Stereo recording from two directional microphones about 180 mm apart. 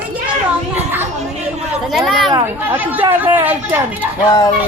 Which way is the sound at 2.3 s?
10° right (ahead or behind).